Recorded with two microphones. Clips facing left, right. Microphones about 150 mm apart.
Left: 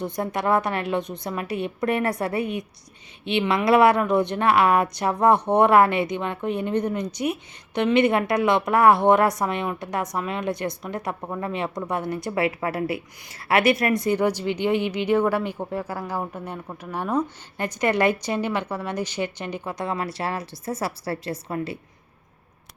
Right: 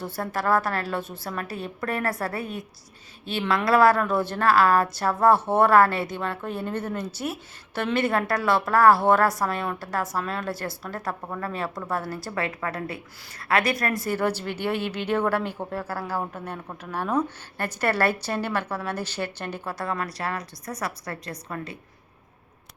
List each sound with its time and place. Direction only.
0.0 s a woman's voice: 20° left (ahead or behind)
3.7 s a woman's voice: 20° left (ahead or behind)